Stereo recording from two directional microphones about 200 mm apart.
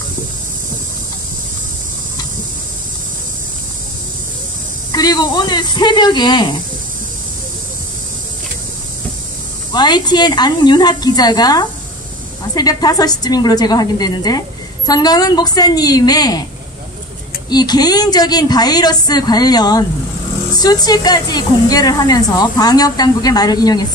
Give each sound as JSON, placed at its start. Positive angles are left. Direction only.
{"t": 4.9, "sound": "a woman's voice", "side_deg": 20}
{"t": 9.7, "sound": "a woman's voice", "side_deg": 20}
{"t": 17.5, "sound": "a woman's voice", "side_deg": 20}